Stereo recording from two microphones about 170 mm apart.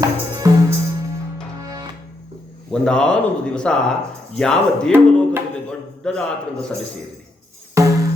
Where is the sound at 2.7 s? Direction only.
5° left (ahead or behind).